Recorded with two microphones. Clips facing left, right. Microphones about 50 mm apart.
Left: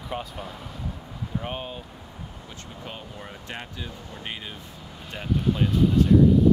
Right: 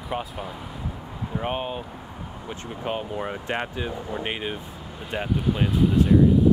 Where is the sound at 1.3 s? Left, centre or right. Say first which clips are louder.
Right 5 dB; right.